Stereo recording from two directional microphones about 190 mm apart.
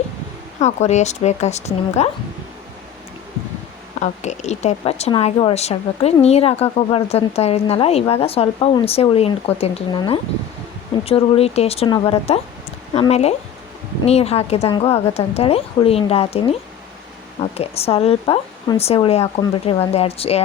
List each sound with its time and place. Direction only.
0.6 s a woman's voice: 35° left (ahead or behind)
4.0 s a woman's voice: 35° left (ahead or behind)